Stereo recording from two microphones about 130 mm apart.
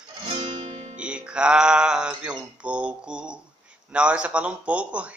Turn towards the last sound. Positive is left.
turn(degrees=-10)  # may be behind; listen again after turning